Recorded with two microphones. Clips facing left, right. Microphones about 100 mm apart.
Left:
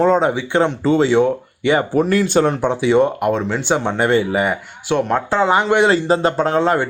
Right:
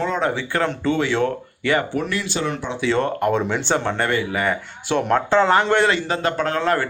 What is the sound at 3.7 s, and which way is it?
Speech, 15° left (ahead or behind).